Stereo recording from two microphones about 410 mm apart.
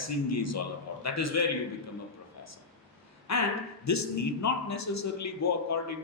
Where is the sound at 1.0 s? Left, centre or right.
Left.